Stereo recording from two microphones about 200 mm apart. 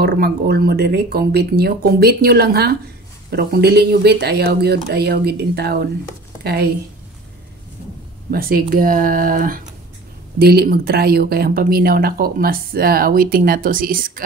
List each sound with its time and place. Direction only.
0.0 s speech: 50° right (ahead or behind)
8.3 s speech: 50° right (ahead or behind)